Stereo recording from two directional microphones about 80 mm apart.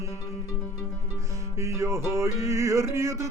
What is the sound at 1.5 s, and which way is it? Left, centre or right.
Music, right.